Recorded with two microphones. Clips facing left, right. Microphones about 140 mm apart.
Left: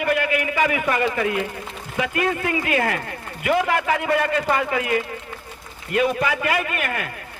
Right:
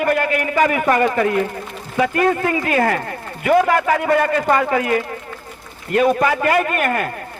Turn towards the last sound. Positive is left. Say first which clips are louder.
# right 7 dB
turn(degrees=-45)  # may be behind; listen again after turning